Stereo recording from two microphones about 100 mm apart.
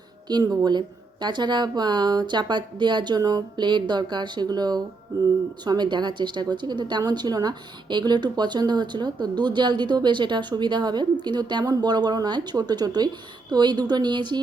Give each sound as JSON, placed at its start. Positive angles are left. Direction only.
{"t": 0.3, "sound": "a woman's voice", "side_deg": -45}